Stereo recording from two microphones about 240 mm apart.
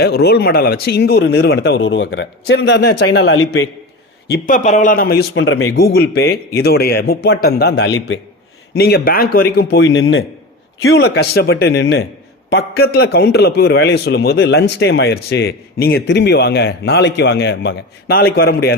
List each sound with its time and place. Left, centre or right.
0.0 s a man's voice: left
4.3 s a man's voice: left
5.8 s a man's voice: left